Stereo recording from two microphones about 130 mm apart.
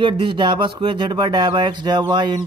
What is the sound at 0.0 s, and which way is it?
Speech, 40° right (ahead or behind).